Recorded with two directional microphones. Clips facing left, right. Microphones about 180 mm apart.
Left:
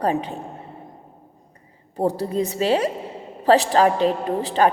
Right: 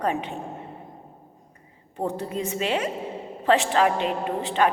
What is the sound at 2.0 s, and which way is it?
A woman's voice, 35° left (ahead or behind).